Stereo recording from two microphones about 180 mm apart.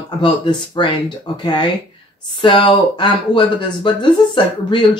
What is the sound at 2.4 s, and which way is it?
Speech, 25° left (ahead or behind).